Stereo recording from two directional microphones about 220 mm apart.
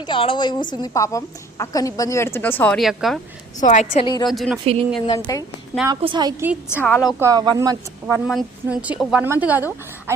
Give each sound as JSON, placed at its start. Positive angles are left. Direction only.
{"t": 0.0, "sound": "a woman's voice", "side_deg": 25}
{"t": 3.6, "sound": "a woman's voice", "side_deg": 35}
{"t": 4.0, "sound": "speech", "side_deg": 20}
{"t": 4.3, "sound": "speech", "side_deg": 0}
{"t": 5.0, "sound": "a woman's voice", "side_deg": 15}
{"t": 5.9, "sound": "a woman's voice", "side_deg": -20}
{"t": 6.7, "sound": "a woman's voice", "side_deg": 10}
{"t": 7.2, "sound": "a woman's voice", "side_deg": -15}
{"t": 8.1, "sound": "a woman's voice", "side_deg": 0}